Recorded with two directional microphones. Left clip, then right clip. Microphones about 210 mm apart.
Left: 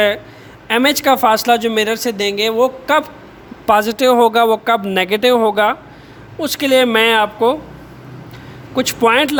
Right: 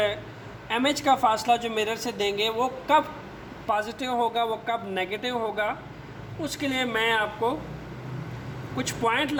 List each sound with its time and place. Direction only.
0.7 s speech: 45° left (ahead or behind)
8.7 s speech: 55° left (ahead or behind)